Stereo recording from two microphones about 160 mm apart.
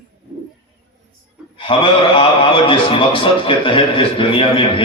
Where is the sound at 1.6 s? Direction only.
35° left (ahead or behind).